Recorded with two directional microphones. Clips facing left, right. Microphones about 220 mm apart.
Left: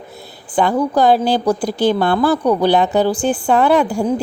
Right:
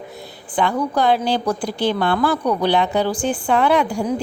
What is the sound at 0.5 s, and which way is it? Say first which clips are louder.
Speech: left 4 dB; 40° left (ahead or behind).